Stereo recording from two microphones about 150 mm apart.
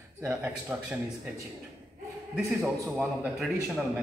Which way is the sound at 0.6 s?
10° right (ahead or behind).